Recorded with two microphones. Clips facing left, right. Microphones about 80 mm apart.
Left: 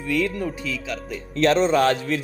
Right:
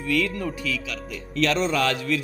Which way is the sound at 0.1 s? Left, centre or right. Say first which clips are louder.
Left 1 dB; left.